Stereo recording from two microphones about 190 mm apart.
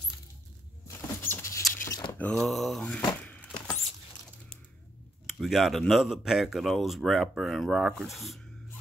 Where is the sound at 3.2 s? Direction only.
5° left (ahead or behind).